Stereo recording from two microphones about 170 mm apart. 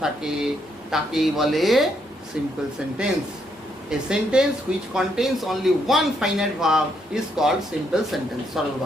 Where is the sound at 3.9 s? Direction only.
5° right (ahead or behind).